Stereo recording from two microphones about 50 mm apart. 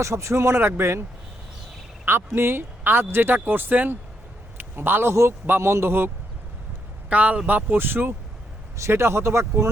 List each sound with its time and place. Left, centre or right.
0.0 s speech: right
2.0 s speech: right
4.5 s a sound: right
5.5 s speech: right
7.1 s speech: right
7.4 s speech: right
8.9 s speech: right